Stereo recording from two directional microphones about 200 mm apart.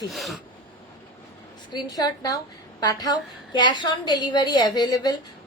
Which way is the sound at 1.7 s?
20° left (ahead or behind).